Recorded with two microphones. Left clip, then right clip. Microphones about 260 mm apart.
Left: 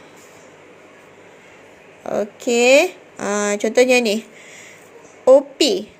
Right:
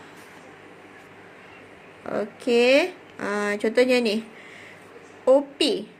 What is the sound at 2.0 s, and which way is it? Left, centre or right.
A woman's voice, centre.